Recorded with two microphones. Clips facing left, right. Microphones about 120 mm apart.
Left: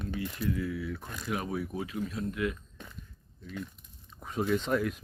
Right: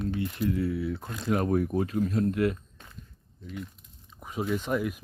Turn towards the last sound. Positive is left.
turn(degrees=-10)  # may be behind; listen again after turning